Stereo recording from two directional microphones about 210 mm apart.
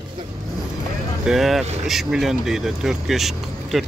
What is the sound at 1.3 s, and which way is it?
Speech, centre (ahead or behind).